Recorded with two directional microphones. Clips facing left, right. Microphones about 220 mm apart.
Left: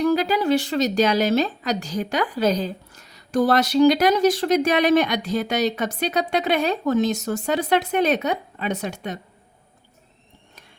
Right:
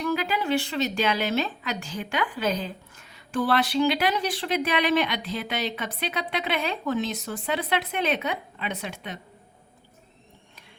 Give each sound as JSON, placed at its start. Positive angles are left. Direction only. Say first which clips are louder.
{"t": 0.0, "sound": "a woman's voice", "louder": "left 7 dB", "side_deg": 35}